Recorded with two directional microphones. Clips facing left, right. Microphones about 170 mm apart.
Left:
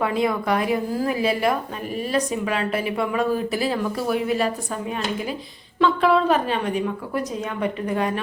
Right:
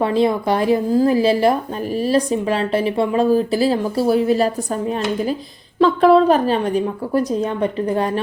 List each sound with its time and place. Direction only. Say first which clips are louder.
0.0 s a woman's voice: right 5 dB; 30° right (ahead or behind)